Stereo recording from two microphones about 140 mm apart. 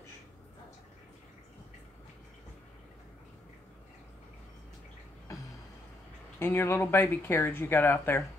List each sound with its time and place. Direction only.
6.4 s speech: 15° left (ahead or behind)